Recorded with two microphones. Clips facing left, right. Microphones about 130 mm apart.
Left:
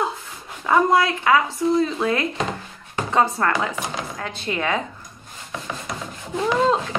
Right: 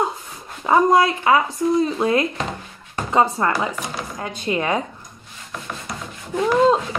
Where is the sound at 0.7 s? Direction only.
20° right (ahead or behind).